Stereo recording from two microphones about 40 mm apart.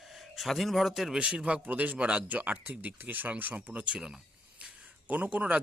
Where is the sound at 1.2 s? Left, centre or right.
Right.